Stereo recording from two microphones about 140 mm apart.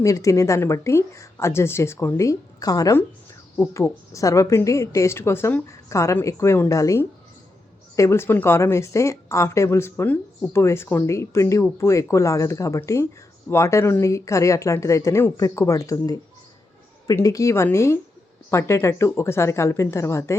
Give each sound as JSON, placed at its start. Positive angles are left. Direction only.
{"t": 0.0, "sound": "a woman's voice", "side_deg": 20}